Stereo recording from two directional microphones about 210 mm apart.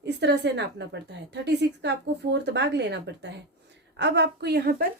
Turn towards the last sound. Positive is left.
turn(degrees=-50)  # may be behind; listen again after turning